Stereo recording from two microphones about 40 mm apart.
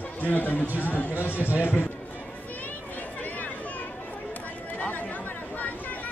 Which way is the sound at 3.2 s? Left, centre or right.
Left.